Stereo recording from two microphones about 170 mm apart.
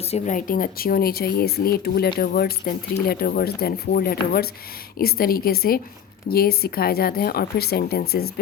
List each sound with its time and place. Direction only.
0.0 s speech: 45° left (ahead or behind); by 8.3 s 65° left (ahead or behind)